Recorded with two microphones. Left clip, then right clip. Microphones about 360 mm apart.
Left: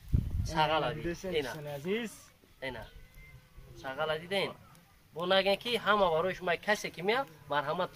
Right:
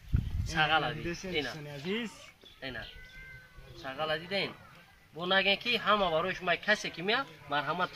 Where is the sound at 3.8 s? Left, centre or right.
Centre.